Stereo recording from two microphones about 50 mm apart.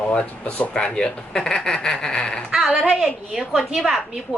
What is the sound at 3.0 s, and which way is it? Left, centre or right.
Speech, centre.